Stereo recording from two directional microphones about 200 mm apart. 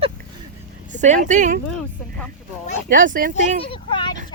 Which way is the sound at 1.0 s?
40° right (ahead or behind).